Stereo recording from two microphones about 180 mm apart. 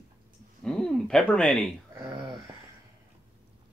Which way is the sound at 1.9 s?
15° right (ahead or behind).